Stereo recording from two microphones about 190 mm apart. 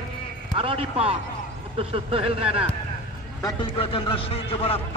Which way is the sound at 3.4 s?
25° left (ahead or behind).